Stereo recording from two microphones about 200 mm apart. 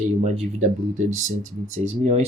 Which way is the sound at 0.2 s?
40° right (ahead or behind).